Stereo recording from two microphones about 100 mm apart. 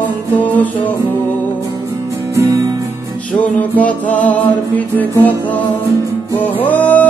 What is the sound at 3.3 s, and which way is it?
Music, 15° left (ahead or behind).